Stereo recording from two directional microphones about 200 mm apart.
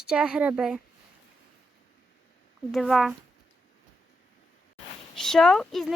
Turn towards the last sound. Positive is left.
turn(degrees=0)  # may be behind; listen again after turning